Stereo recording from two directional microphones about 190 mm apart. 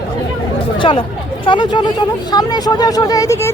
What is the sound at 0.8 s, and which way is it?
Speech, 25° left (ahead or behind).